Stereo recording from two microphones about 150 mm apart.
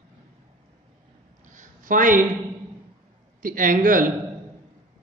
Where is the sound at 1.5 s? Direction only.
60° right (ahead or behind).